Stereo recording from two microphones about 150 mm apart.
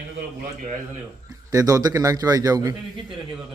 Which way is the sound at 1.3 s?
25° right (ahead or behind).